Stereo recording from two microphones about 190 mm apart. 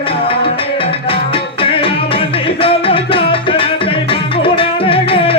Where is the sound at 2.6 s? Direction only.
30° left (ahead or behind).